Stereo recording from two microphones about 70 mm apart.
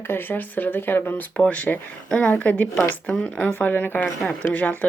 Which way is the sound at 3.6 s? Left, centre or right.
Left.